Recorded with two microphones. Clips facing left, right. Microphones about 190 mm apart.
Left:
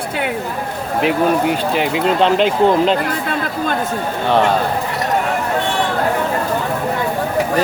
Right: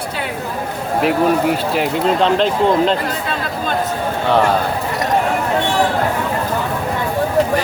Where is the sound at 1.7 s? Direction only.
Centre (ahead or behind).